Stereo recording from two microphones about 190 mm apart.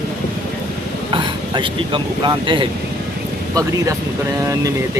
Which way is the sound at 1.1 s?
25° right (ahead or behind).